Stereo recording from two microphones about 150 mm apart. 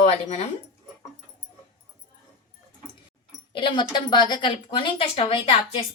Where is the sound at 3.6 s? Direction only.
30° left (ahead or behind).